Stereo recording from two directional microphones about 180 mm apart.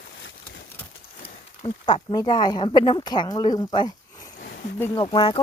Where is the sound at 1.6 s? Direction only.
25° left (ahead or behind).